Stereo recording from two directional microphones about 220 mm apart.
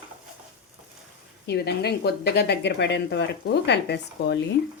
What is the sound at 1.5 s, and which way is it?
A woman's voice, 50° left (ahead or behind).